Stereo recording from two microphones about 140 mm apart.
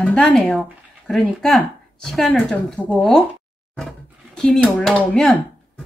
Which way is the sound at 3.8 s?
5° left (ahead or behind).